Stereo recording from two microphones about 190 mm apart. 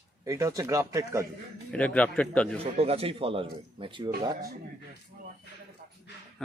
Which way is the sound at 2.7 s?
30° right (ahead or behind).